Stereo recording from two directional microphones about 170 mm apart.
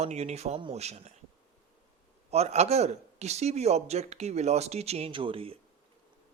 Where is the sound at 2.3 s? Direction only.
40° right (ahead or behind).